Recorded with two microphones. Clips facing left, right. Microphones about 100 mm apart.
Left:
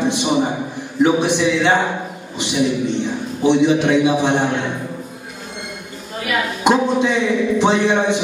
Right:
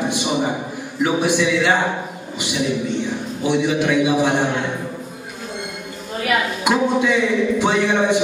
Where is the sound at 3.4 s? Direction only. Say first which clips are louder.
Left 5 dB; 20° left (ahead or behind).